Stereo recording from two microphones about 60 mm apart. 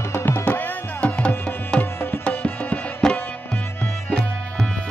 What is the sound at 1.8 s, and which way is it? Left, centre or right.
Music, left.